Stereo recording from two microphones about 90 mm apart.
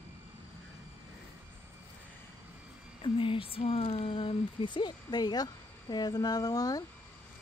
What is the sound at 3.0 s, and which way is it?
Speech, 75° left (ahead or behind).